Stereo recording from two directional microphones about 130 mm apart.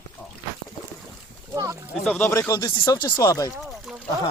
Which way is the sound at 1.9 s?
Centre (ahead or behind).